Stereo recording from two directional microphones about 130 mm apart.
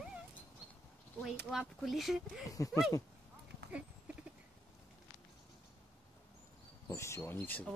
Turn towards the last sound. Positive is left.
turn(degrees=15)  # may be behind; listen again after turning